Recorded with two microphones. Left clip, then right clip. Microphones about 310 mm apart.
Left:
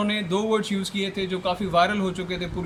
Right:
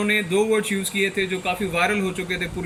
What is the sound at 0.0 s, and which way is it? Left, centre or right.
Speech, centre.